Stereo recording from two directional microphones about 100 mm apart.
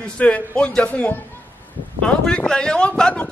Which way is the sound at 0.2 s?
10° left (ahead or behind).